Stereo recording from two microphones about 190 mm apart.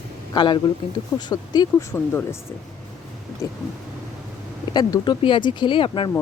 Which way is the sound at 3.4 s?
15° left (ahead or behind).